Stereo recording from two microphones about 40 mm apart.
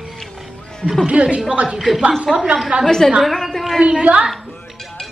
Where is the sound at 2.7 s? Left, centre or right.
Right.